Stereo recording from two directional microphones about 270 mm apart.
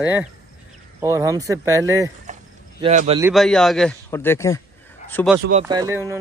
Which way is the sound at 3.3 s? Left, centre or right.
Centre.